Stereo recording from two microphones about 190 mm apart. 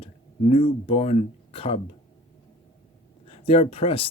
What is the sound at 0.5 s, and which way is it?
Speech, 30° left (ahead or behind).